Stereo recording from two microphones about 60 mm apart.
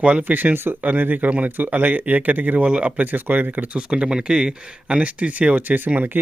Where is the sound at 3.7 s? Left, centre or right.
Centre.